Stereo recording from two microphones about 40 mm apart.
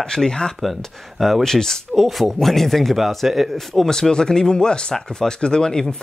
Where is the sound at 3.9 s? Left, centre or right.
Centre.